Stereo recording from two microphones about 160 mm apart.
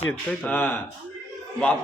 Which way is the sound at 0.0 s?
10° left (ahead or behind).